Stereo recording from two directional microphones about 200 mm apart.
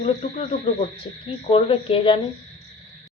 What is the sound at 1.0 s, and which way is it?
A woman's voice, 25° left (ahead or behind).